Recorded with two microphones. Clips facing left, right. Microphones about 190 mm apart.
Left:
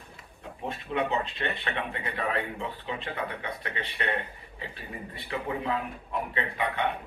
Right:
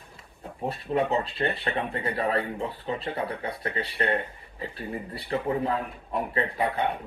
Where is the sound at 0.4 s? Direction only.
35° right (ahead or behind).